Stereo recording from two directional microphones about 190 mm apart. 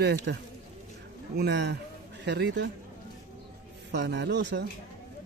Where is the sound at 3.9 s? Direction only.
65° right (ahead or behind).